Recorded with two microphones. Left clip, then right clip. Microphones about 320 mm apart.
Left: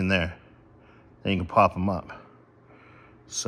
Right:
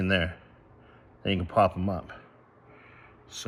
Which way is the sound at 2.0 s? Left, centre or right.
Centre.